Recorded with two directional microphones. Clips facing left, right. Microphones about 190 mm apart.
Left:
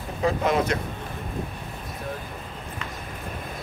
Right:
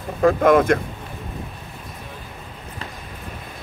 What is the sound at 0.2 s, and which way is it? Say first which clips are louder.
Speech: right 8 dB; 55° right (ahead or behind).